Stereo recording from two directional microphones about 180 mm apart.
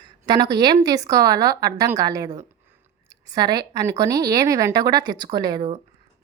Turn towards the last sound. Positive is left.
turn(degrees=-20)  # may be behind; listen again after turning